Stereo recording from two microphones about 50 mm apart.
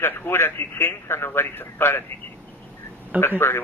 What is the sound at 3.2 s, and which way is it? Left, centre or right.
Speech, left.